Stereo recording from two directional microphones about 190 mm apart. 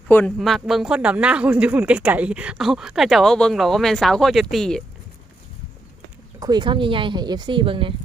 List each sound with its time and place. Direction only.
0.1 s speech: 10° left (ahead or behind)
0.3 s speech: centre (ahead or behind)
6.4 s speech: 25° right (ahead or behind)